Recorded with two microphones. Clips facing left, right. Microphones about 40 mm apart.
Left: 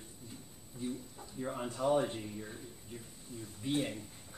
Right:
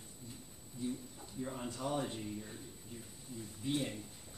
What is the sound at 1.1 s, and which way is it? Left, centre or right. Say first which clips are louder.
A man's voice: left 3 dB; left.